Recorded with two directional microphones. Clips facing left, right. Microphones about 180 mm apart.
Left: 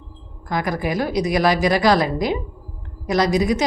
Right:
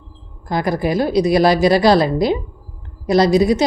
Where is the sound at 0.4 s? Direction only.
30° right (ahead or behind).